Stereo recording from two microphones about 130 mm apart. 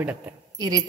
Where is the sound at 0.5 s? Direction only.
30° right (ahead or behind).